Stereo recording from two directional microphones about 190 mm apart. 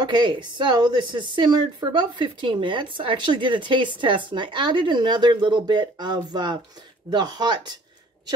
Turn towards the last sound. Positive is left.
turn(degrees=-25)  # may be behind; listen again after turning